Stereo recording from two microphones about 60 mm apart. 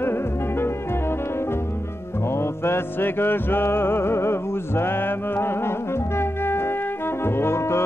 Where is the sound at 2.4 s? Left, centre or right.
Left.